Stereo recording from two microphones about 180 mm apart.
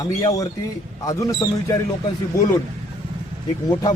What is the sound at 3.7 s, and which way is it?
Speech, 20° left (ahead or behind).